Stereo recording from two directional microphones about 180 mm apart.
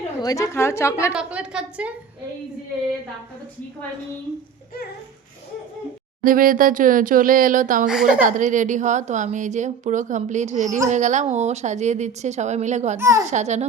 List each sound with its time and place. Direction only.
0.2 s a woman's voice: 20° left (ahead or behind)
1.1 s a woman's voice: 5° right (ahead or behind)
6.2 s a woman's voice: 50° right (ahead or behind)
7.9 s a woman's voice: 5° right (ahead or behind)
8.2 s a woman's voice: 45° right (ahead or behind)
13.0 s a child's voice: 15° right (ahead or behind)
13.3 s a woman's voice: 40° right (ahead or behind)